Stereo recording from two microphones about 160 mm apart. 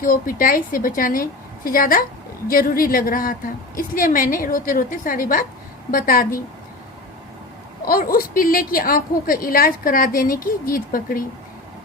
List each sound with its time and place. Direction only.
0.0 s a woman's voice: 60° left (ahead or behind)
7.9 s a woman's voice: 65° left (ahead or behind)